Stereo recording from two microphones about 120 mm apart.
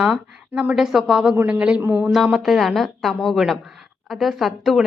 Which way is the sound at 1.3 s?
15° right (ahead or behind).